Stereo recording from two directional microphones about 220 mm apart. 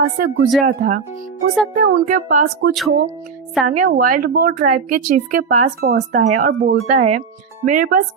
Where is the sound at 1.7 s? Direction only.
40° right (ahead or behind).